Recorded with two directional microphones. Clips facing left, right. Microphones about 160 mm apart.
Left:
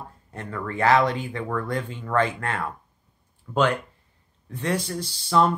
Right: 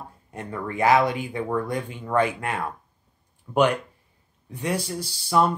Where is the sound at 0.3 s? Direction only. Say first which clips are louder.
Right 1 dB; 15° right (ahead or behind).